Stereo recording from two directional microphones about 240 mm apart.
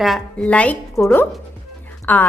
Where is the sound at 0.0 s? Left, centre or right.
Centre.